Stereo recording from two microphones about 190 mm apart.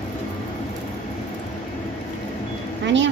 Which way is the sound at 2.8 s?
75° right (ahead or behind).